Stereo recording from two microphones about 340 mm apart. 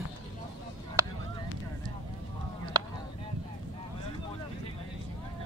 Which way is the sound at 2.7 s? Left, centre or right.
Centre.